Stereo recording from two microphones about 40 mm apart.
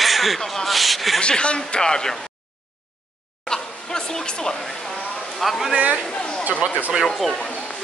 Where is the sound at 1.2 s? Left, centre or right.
Left.